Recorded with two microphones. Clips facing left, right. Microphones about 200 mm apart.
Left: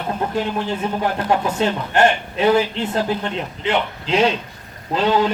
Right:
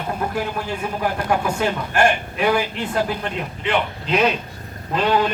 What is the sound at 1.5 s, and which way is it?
Speech, 25° left (ahead or behind).